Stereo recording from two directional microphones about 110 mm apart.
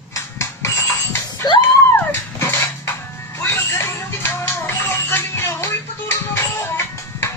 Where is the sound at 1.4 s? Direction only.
40° left (ahead or behind).